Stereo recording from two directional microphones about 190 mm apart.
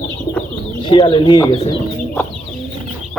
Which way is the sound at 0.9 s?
25° left (ahead or behind).